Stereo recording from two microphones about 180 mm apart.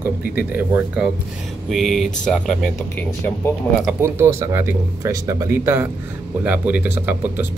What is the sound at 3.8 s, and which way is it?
Speech, 15° right (ahead or behind).